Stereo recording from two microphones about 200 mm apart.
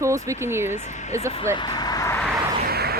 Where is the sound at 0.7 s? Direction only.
35° left (ahead or behind).